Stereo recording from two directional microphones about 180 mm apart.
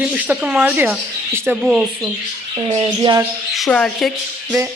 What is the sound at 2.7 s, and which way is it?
Speech, 30° right (ahead or behind).